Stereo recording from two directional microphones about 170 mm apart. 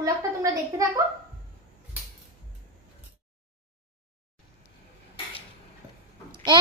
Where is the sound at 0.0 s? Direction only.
20° right (ahead or behind).